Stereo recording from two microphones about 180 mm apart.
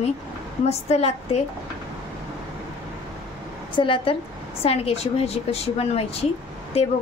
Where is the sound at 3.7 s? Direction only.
30° left (ahead or behind).